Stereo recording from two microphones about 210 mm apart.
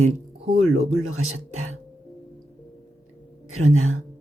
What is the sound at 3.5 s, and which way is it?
Speech, 80° right.